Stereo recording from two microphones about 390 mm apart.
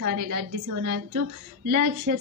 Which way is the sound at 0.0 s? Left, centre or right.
Right.